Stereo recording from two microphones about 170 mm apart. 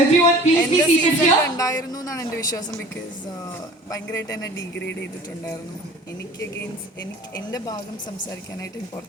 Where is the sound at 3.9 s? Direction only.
20° left (ahead or behind).